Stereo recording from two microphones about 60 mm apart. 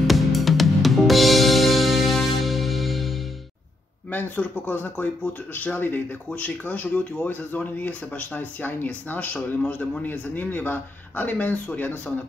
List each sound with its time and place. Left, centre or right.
0.0 s music: centre
4.1 s speech: left